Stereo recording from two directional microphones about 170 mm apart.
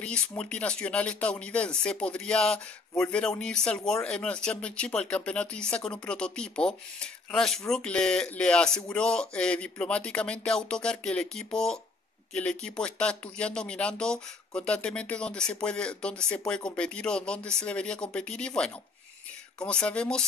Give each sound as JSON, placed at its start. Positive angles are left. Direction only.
{"t": 0.4, "sound": "speech", "side_deg": 5}